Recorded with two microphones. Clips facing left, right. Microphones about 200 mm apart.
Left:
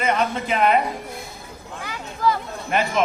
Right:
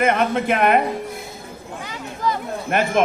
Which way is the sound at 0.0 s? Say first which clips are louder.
Right 4 dB; 55° right (ahead or behind).